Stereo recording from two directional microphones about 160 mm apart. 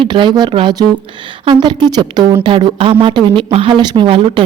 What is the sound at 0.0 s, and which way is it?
Speech, 30° right (ahead or behind).